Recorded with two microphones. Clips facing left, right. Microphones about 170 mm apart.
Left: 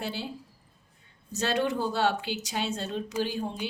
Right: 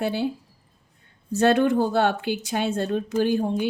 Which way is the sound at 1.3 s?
55° right (ahead or behind).